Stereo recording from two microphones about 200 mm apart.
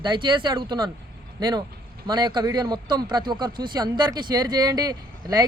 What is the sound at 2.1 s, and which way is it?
Speech, 20° right (ahead or behind).